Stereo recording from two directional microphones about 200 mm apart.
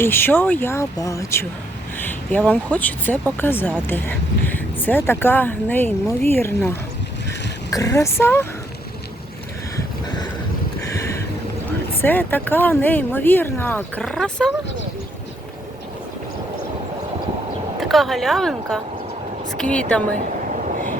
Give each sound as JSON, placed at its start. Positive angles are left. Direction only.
{"t": 0.0, "sound": "speech", "side_deg": 10}
{"t": 2.5, "sound": "speech", "side_deg": 10}
{"t": 10.8, "sound": "a sound", "side_deg": 15}
{"t": 12.0, "sound": "speech", "side_deg": 10}
{"t": 17.7, "sound": "a woman's voice", "side_deg": 0}